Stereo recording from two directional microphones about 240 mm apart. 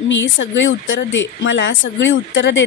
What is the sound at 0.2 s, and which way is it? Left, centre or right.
A woman's voice, left.